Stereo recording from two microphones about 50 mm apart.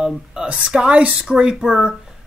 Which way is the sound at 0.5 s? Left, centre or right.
Right.